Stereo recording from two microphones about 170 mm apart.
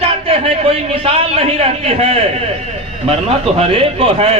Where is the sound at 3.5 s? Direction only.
35° right (ahead or behind).